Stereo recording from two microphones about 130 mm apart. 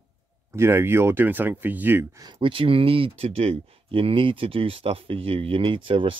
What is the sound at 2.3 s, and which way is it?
Speech, 45° right (ahead or behind).